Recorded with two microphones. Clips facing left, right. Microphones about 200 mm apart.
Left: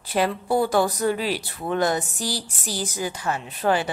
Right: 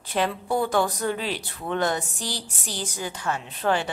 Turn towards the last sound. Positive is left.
turn(degrees=10)  # may be behind; listen again after turning